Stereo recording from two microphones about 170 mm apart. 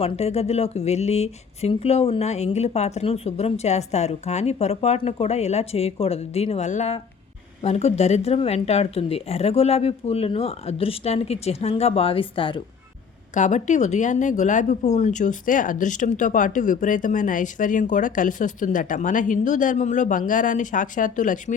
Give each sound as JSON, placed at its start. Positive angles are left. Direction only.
{"t": 0.0, "sound": "speech", "side_deg": 40}
{"t": 13.3, "sound": "speech", "side_deg": 45}